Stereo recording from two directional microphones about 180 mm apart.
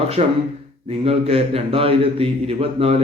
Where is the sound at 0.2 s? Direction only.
35° right (ahead or behind).